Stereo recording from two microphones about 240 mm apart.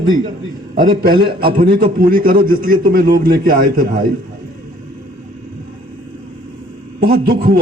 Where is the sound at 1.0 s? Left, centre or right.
Right.